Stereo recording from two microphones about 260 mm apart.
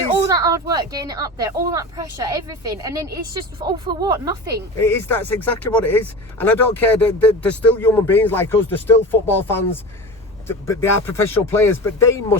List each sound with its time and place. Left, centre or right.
0.3 s speech: centre
4.8 s speech: centre